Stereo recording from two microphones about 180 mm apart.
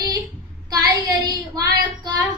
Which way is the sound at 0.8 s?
20° right (ahead or behind).